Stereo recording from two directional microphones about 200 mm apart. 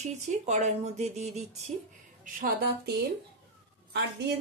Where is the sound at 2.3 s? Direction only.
45° right (ahead or behind).